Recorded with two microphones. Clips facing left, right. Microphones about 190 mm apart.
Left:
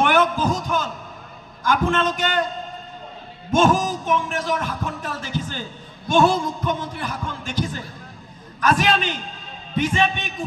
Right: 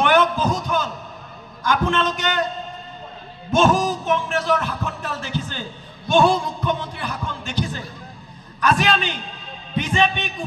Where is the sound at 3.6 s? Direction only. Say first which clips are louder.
Right 1 dB; 45° left (ahead or behind).